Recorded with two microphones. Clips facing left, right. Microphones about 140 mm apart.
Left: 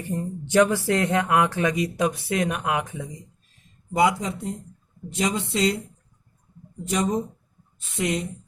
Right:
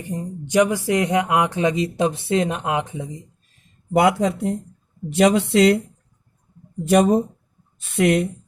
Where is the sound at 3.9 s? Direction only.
65° right (ahead or behind).